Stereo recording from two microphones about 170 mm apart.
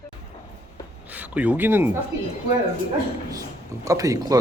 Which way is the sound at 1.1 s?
10° right (ahead or behind).